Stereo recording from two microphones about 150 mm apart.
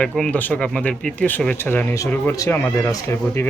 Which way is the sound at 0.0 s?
5° left (ahead or behind).